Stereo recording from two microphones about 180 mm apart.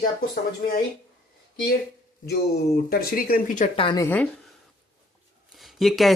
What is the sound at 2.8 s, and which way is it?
Speech, 55° left (ahead or behind).